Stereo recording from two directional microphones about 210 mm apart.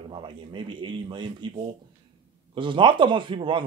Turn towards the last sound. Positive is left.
turn(degrees=-25)  # may be behind; listen again after turning